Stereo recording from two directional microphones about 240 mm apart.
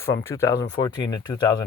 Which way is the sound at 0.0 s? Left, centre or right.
Centre.